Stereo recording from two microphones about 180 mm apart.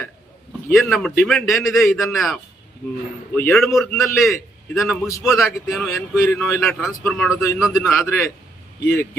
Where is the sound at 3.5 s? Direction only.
Centre (ahead or behind).